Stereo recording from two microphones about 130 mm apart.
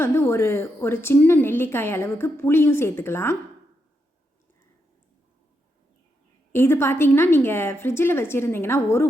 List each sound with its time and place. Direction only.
0.0 s a woman's voice: 20° left (ahead or behind)
6.5 s a woman's voice: 20° left (ahead or behind)